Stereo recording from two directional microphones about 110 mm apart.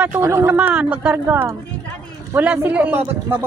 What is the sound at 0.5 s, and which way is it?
A man's voice, 15° right (ahead or behind).